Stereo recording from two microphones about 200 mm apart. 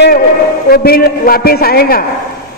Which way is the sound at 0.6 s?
50° left (ahead or behind).